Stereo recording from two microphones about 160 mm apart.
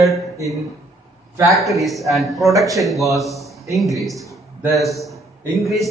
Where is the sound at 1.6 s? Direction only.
Centre (ahead or behind).